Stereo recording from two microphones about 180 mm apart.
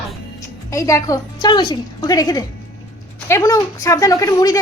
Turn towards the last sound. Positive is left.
turn(degrees=20)  # may be behind; listen again after turning